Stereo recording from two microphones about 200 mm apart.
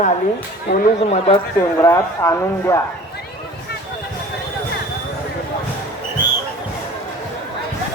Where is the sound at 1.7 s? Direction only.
15° left (ahead or behind).